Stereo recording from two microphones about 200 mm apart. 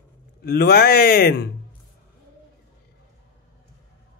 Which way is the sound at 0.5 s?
50° left (ahead or behind).